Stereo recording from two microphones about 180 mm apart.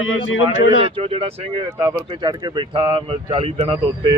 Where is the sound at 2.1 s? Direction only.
25° right (ahead or behind).